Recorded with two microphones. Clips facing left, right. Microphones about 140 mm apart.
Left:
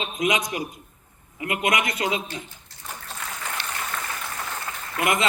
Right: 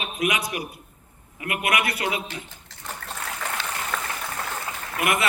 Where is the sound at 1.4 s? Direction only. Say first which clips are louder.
Left 3 dB; 20° left (ahead or behind).